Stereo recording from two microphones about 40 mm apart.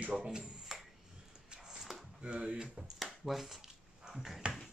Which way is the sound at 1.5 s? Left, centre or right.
Centre.